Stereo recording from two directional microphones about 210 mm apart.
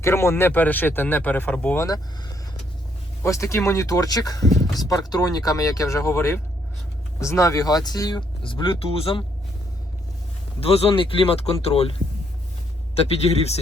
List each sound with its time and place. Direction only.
0.0 s speech: 10° left (ahead or behind)
3.2 s speech: 15° left (ahead or behind)
10.6 s speech: 30° left (ahead or behind)